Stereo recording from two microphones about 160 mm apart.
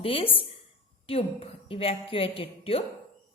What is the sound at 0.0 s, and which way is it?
A woman's voice, 35° left (ahead or behind).